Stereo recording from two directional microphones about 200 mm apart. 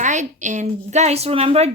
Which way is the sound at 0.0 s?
35° right (ahead or behind).